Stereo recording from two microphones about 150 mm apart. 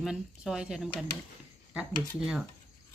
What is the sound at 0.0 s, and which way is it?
Speech, 5° right (ahead or behind).